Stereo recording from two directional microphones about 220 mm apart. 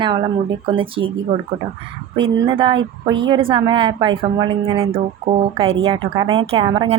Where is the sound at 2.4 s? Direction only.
25° right (ahead or behind).